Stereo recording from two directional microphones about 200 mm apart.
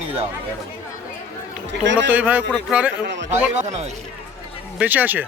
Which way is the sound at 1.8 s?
65° right (ahead or behind).